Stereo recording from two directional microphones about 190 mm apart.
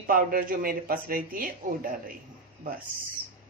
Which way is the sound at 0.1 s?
50° right (ahead or behind).